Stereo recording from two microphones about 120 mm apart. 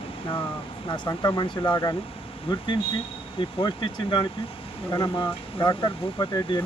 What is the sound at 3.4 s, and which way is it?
Speech, 40° left (ahead or behind).